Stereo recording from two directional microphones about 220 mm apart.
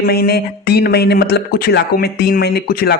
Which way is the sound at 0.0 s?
45° left (ahead or behind).